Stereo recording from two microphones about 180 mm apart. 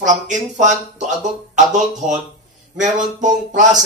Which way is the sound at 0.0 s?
45° right (ahead or behind).